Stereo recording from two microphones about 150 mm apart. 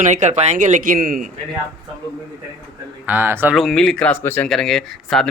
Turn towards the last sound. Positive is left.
turn(degrees=0)  # may be behind; listen again after turning